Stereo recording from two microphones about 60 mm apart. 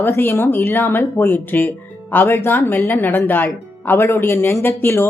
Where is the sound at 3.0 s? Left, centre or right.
Left.